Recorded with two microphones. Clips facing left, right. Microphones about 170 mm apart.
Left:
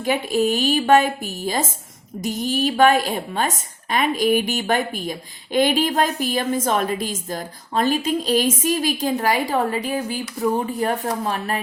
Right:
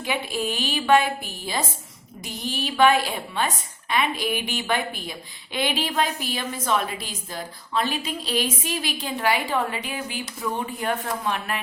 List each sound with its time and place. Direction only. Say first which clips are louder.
0.0 s a woman's voice: left 7 dB; 45° left (ahead or behind)